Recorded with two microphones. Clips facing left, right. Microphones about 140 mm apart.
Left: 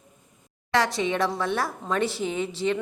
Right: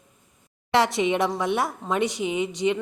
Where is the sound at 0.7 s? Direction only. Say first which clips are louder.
Right 3 dB; 25° right (ahead or behind).